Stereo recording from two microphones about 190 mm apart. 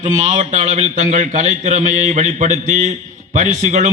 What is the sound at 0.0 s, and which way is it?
A man's voice, 35° right (ahead or behind).